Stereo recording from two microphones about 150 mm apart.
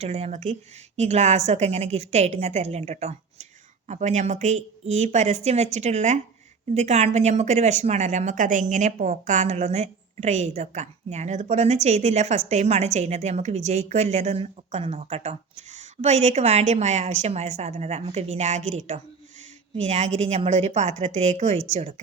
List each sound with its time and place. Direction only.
0.0 s a woman's voice: 45° right (ahead or behind)